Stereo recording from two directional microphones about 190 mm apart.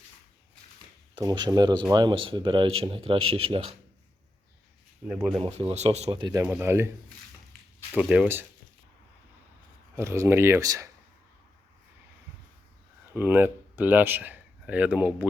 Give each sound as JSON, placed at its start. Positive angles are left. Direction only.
{"t": 1.1, "sound": "speech", "side_deg": -25}
{"t": 5.0, "sound": "speech", "side_deg": -5}
{"t": 5.5, "sound": "speech", "side_deg": -35}
{"t": 7.9, "sound": "speech", "side_deg": -5}
{"t": 9.9, "sound": "speech", "side_deg": -15}
{"t": 13.1, "sound": "speech", "side_deg": -10}